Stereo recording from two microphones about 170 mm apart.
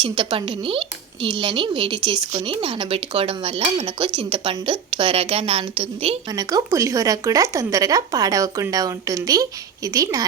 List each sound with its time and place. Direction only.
0.0 s speech: 30° right (ahead or behind)
6.3 s speech: 20° right (ahead or behind)